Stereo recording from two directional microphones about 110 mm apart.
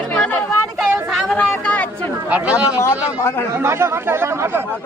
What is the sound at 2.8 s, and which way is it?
Speech, 25° left (ahead or behind).